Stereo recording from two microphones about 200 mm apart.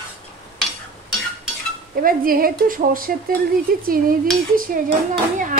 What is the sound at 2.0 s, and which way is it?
Speech, 45° right (ahead or behind).